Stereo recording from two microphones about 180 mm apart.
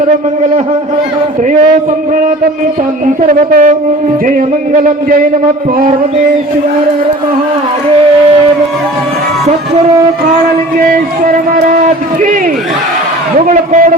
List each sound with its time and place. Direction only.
3.5 s speech: 45° right (ahead or behind)
13.5 s a man's voice: 45° right (ahead or behind)